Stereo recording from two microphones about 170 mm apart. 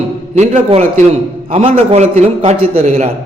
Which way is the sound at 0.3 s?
40° right (ahead or behind).